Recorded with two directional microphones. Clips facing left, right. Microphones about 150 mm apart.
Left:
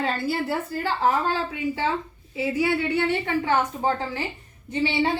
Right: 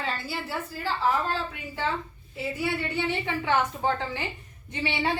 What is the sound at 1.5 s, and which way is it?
A woman's voice, 90° left.